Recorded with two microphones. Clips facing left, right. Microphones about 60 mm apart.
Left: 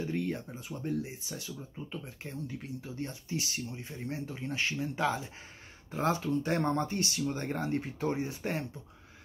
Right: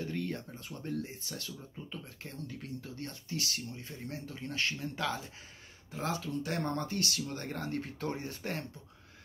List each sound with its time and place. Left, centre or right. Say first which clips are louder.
0.0 s speech: left 3 dB; centre
5.9 s speech: left 6 dB; left; by 8.6 s centre